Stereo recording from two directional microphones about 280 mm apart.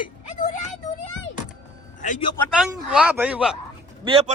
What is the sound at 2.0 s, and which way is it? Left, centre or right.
Speech, left.